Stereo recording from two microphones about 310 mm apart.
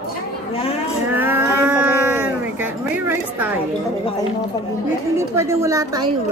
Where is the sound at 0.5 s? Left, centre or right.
Centre.